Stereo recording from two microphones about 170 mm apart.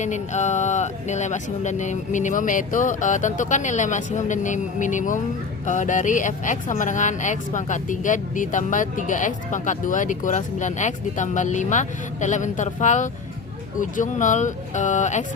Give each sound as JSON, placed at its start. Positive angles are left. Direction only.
{"t": 0.0, "sound": "speech", "side_deg": 45}